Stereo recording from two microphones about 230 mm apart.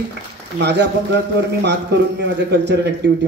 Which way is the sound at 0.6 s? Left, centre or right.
Right.